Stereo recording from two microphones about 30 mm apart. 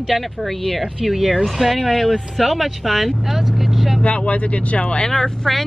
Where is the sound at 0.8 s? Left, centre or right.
Centre.